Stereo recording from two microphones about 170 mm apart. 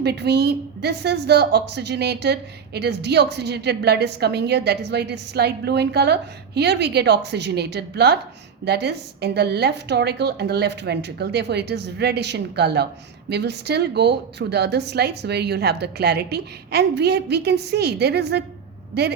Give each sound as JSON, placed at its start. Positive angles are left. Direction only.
{"t": 0.0, "sound": "a woman's voice", "side_deg": -75}